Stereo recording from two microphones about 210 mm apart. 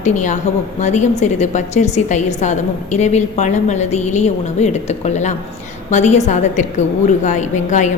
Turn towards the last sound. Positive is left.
turn(degrees=35)  # may be behind; listen again after turning